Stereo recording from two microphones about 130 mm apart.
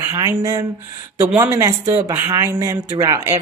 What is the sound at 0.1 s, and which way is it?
Speech, 30° right (ahead or behind).